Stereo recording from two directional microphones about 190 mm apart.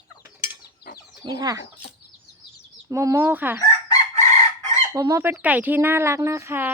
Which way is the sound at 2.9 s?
15° right (ahead or behind).